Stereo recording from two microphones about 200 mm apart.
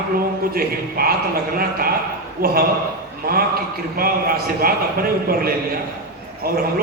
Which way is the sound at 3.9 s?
45° right (ahead or behind).